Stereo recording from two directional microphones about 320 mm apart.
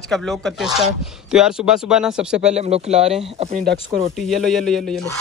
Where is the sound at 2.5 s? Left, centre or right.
Centre.